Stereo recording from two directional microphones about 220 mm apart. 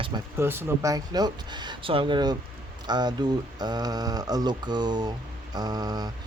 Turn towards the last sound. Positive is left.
turn(degrees=-15)  # may be behind; listen again after turning